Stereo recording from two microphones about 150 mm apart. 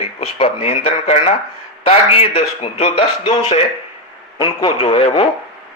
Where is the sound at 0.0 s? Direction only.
40° left (ahead or behind).